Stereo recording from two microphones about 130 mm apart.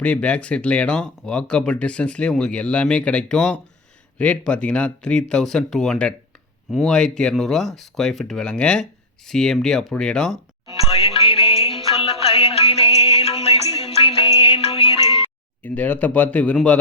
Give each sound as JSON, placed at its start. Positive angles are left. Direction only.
{"t": 0.0, "sound": "speech", "side_deg": 10}
{"t": 10.8, "sound": "music", "side_deg": 50}
{"t": 15.6, "sound": "speech", "side_deg": 15}